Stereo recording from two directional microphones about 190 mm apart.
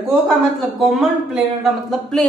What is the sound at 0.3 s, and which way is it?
Speech, centre (ahead or behind).